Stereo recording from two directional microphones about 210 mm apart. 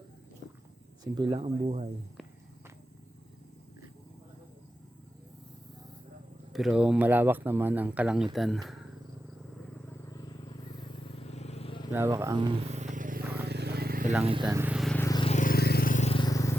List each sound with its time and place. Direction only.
1.0 s speech: 25° right (ahead or behind)
6.5 s speech: centre (ahead or behind)
9.9 s vehicle: 15° left (ahead or behind)
11.9 s a sound: 10° right (ahead or behind); by 13.2 s 40° right (ahead or behind)
13.4 s vehicle: 50° right (ahead or behind)
14.3 s speech: 20° right (ahead or behind); by 14.9 s 5° right (ahead or behind)
14.9 s a sound: 15° left (ahead or behind)
15.2 s vehicle: 35° left (ahead or behind); by 16.6 s 15° left (ahead or behind)